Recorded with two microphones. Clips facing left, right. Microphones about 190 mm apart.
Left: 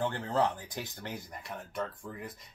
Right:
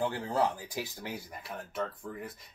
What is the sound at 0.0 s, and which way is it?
Speech, 10° right (ahead or behind).